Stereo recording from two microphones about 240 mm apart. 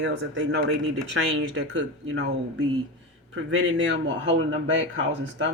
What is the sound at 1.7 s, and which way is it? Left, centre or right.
Speech, right.